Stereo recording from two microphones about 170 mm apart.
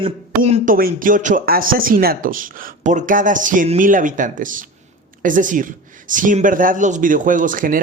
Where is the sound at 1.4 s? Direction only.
60° right (ahead or behind).